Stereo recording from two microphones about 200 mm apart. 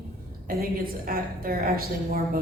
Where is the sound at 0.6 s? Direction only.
45° right (ahead or behind).